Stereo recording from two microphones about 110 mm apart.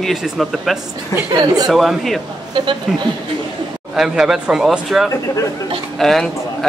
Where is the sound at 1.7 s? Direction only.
Centre (ahead or behind).